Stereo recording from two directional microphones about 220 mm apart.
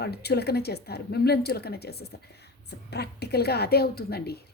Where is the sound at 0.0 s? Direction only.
45° left (ahead or behind).